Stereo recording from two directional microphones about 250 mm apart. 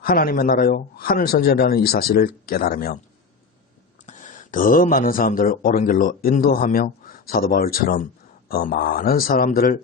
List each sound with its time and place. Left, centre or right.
0.0 s speech: left
4.0 s speech: left